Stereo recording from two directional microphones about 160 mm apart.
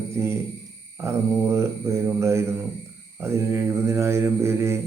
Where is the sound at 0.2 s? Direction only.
15° right (ahead or behind).